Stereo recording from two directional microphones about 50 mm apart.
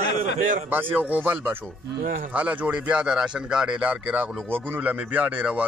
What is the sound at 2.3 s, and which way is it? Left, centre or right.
Speech, right.